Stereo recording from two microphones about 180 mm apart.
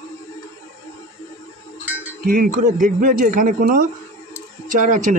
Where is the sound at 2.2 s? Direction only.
50° right (ahead or behind).